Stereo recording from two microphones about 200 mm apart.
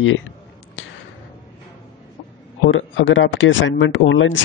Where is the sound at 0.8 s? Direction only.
70° left (ahead or behind).